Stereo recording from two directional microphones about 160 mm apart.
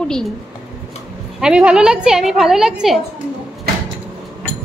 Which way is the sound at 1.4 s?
5° right (ahead or behind).